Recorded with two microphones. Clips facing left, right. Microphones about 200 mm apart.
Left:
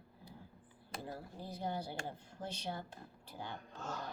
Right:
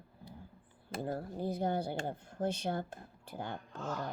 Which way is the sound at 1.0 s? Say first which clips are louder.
Right 10 dB; 55° right (ahead or behind).